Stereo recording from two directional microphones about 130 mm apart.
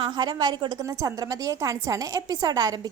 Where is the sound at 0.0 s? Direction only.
30° right (ahead or behind).